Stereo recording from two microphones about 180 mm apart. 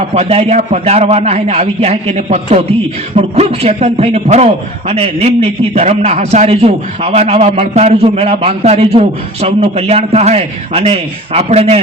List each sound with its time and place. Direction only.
0.1 s a man's voice: 35° right (ahead or behind)